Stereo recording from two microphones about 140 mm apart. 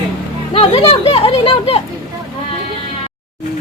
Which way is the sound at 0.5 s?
45° left (ahead or behind).